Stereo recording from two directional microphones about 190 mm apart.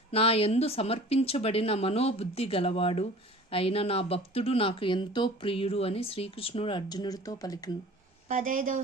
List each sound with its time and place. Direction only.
0.1 s speech: 30° left (ahead or behind)
8.3 s speech: 45° right (ahead or behind)